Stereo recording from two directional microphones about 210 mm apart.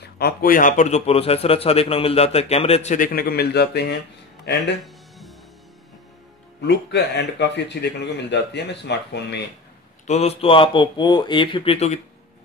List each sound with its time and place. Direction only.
0.0 s a man's voice: 45° left (ahead or behind)
6.6 s speech: 55° left (ahead or behind)
10.0 s speech: 30° left (ahead or behind)